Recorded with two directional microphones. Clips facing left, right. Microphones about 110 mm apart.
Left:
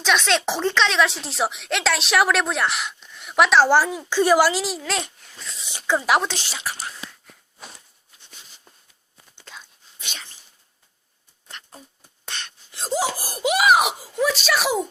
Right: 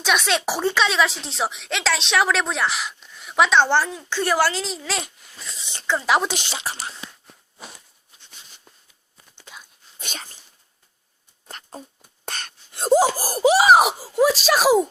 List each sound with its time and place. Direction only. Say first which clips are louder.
0.0 s speech: left 1 dB; 10° right (ahead or behind)
5.9 s a woman's voice: left 1 dB; 15° left (ahead or behind)
6.7 s speech: left 1 dB; 30° right (ahead or behind)
9.5 s dog: left 1 dB; 15° right (ahead or behind)
10.0 s dog: right 3 dB; 45° right (ahead or behind)
11.4 s a sound: right 4 dB; 40° right (ahead or behind)
12.2 s wail: right 2 dB; 45° right (ahead or behind)